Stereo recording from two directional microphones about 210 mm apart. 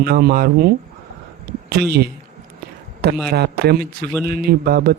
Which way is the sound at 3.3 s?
50° right (ahead or behind).